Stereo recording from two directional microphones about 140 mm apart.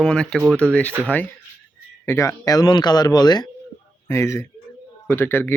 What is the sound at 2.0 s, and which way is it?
Speech, 20° left (ahead or behind).